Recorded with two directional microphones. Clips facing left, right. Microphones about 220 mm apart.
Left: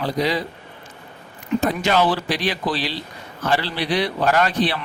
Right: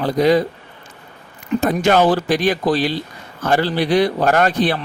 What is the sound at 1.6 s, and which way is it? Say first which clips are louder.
Speech: right 5 dB; 50° right (ahead or behind).